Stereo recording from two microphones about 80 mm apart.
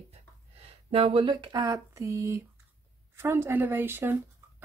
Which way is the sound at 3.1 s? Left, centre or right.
Right.